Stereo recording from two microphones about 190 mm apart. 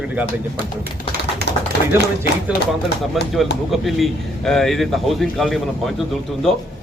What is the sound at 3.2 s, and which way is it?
A man's voice, centre (ahead or behind).